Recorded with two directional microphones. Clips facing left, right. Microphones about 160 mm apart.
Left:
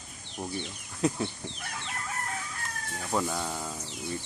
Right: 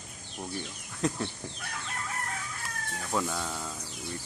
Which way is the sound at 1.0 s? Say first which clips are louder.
Left 2 dB; 5° left (ahead or behind).